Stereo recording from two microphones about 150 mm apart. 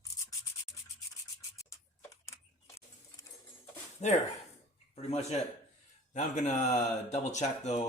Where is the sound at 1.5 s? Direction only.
20° left (ahead or behind).